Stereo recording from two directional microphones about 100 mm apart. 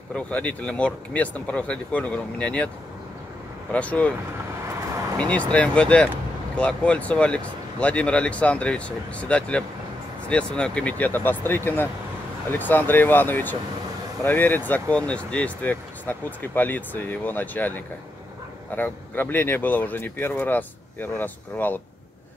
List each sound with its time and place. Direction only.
0.1 s speech: 15° left (ahead or behind)
3.7 s speech: 15° left (ahead or behind)
4.6 s vehicle: 40° right (ahead or behind)
5.3 s speech: 15° left (ahead or behind)